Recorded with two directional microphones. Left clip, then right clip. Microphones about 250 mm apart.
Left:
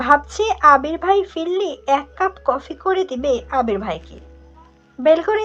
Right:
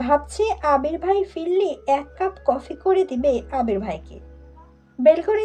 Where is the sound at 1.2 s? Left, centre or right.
Centre.